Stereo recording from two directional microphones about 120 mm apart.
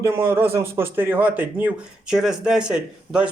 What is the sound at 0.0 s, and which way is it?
Speech, 20° right (ahead or behind).